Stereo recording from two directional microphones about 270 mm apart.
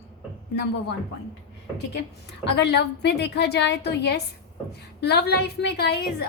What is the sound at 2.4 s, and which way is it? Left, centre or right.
A woman's voice, left.